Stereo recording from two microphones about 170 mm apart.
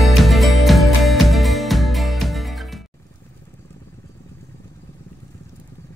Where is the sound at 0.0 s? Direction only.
Centre (ahead or behind).